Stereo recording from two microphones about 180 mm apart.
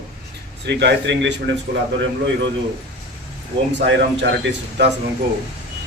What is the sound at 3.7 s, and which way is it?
Speech, 80° right.